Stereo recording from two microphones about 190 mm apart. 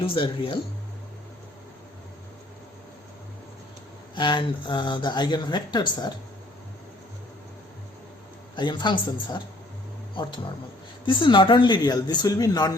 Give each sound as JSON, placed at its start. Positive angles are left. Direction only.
{"t": 0.0, "sound": "speech", "side_deg": 30}
{"t": 4.1, "sound": "speech", "side_deg": 25}
{"t": 8.5, "sound": "speech", "side_deg": 25}